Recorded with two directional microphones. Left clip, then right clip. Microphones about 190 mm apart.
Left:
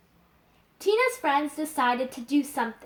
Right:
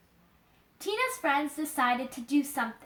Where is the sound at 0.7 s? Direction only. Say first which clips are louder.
Left 7 dB; 10° right (ahead or behind).